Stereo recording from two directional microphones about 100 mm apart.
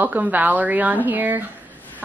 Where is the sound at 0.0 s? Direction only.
20° right (ahead or behind).